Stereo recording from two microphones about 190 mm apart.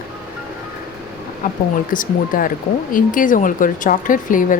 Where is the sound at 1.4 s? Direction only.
45° left (ahead or behind).